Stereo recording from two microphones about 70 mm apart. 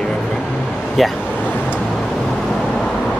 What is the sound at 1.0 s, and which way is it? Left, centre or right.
Speech, centre.